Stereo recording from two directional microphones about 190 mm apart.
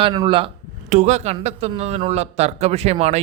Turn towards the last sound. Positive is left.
turn(degrees=-35)  # may be behind; listen again after turning